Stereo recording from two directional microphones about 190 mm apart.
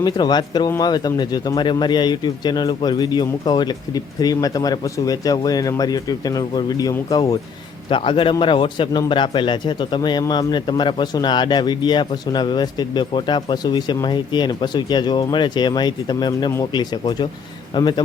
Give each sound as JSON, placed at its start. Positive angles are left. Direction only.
{"t": 0.0, "sound": "a man's voice", "side_deg": 20}